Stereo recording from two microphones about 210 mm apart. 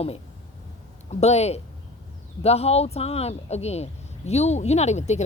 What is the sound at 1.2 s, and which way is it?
Speech, 30° left (ahead or behind).